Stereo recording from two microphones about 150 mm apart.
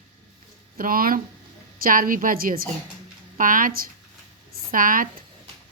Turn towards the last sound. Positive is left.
turn(degrees=-65)  # may be behind; listen again after turning